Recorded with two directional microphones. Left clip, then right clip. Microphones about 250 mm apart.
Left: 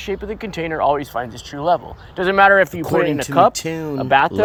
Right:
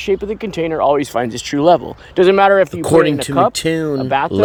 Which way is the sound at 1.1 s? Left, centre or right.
Right.